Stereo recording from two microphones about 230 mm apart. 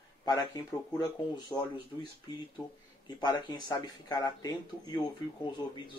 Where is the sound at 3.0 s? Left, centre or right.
Centre.